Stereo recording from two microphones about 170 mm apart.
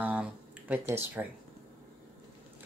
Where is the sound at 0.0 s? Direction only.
10° right (ahead or behind).